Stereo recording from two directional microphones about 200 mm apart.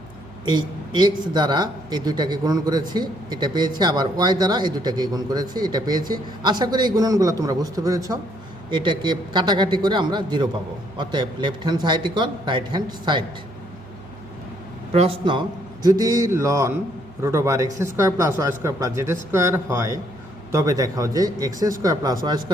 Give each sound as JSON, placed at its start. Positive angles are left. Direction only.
{"t": 0.4, "sound": "a man's voice", "side_deg": -20}
{"t": 14.9, "sound": "speech", "side_deg": -25}